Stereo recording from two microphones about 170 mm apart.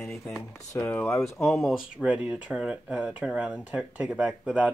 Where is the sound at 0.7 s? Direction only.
10° left (ahead or behind).